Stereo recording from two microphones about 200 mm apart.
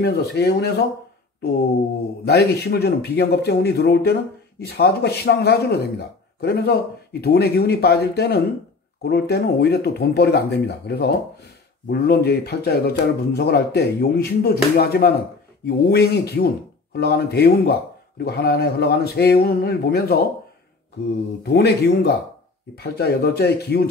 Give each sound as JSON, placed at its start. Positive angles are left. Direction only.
{"t": 0.0, "sound": "speech", "side_deg": 55}
{"t": 2.2, "sound": "speech", "side_deg": 55}
{"t": 21.4, "sound": "speech", "side_deg": 55}